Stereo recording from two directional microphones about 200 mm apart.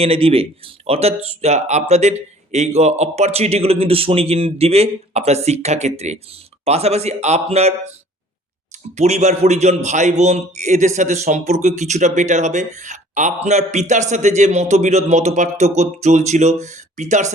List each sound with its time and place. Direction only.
0.0 s a man's voice: 30° right (ahead or behind)
9.0 s a man's voice: 35° right (ahead or behind)